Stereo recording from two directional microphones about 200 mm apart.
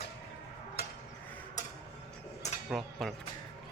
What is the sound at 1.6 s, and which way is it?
Tick-tock, 35° left (ahead or behind).